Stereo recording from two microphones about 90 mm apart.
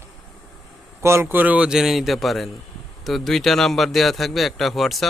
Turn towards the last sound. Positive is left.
turn(degrees=0)  # may be behind; listen again after turning